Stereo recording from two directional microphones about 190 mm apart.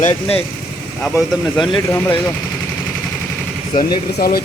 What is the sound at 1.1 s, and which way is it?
Speech, 25° left (ahead or behind).